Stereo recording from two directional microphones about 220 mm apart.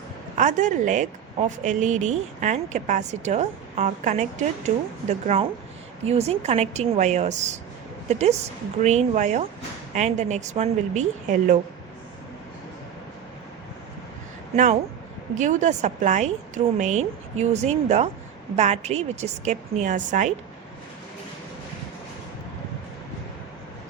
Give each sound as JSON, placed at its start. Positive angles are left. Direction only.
{"t": 0.3, "sound": "a woman's voice", "side_deg": -35}
{"t": 14.5, "sound": "a woman's voice", "side_deg": -35}